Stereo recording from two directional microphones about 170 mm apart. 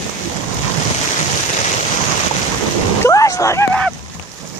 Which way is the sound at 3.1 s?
20° left (ahead or behind).